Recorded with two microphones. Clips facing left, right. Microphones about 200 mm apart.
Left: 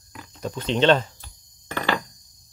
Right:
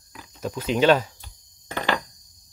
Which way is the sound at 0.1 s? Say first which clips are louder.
Right 1 dB; centre (ahead or behind).